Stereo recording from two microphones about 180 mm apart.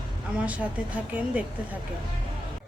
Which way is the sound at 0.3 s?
5° right (ahead or behind).